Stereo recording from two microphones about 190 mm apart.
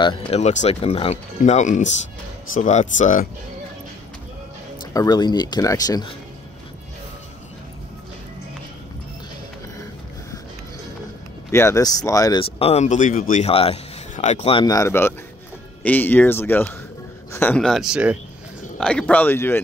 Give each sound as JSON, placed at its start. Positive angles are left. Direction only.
{"t": 0.0, "sound": "speech", "side_deg": 25}
{"t": 4.9, "sound": "speech", "side_deg": 20}
{"t": 11.5, "sound": "speech", "side_deg": 15}